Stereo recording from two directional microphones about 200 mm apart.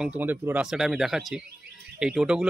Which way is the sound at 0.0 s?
10° right (ahead or behind).